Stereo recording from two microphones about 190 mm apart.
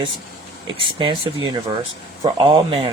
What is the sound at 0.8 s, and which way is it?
Speech, 25° right (ahead or behind).